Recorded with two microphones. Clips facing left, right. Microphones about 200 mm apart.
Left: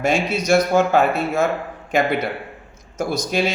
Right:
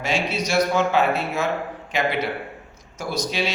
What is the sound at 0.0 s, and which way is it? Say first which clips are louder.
A man's voice: left 4 dB; 50° left (ahead or behind).